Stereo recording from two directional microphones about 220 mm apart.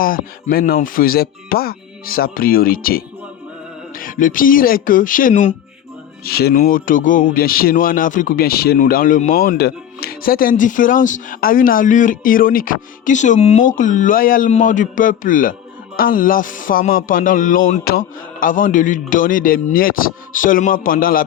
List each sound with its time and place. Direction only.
0.0 s speech: 40° left (ahead or behind)